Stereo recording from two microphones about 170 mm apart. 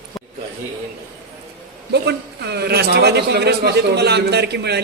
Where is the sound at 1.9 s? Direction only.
80° right.